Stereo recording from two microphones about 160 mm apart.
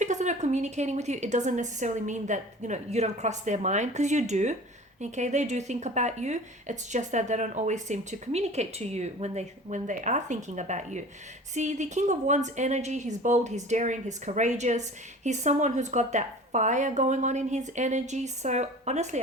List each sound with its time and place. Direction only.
0.0 s speech: 50° right (ahead or behind)